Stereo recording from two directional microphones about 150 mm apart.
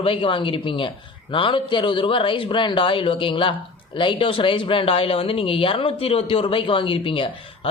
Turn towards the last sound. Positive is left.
turn(degrees=35)  # may be behind; listen again after turning